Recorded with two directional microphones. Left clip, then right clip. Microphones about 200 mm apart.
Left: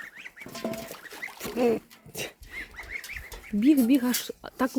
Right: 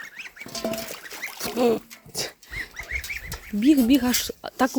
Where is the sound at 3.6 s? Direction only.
5° right (ahead or behind).